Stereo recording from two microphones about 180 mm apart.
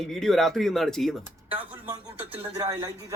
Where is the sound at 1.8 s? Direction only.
10° right (ahead or behind).